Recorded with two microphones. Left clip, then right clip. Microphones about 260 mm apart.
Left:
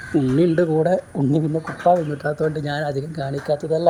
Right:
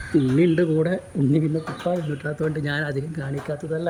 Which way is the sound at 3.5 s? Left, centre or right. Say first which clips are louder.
Left 8 dB; left.